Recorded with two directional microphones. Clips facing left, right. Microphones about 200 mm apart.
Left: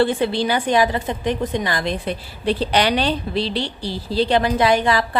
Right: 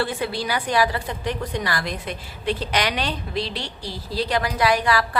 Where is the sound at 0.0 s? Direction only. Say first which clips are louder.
Left 7 dB; 25° left (ahead or behind).